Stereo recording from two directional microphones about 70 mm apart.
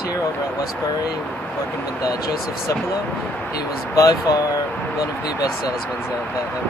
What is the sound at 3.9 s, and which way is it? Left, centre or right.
Speech, left.